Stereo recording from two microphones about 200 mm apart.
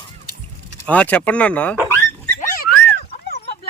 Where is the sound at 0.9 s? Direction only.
5° left (ahead or behind).